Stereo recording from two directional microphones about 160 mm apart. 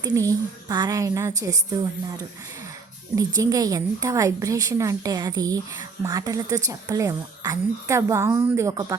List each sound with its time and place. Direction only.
0.0 s speech: 20° right (ahead or behind)